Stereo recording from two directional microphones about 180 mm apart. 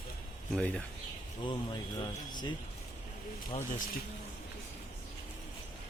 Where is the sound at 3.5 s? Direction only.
40° left (ahead or behind).